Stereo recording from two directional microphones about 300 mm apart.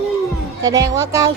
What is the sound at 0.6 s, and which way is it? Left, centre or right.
Music, centre.